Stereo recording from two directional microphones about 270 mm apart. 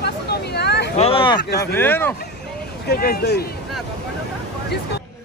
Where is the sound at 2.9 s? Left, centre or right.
Left.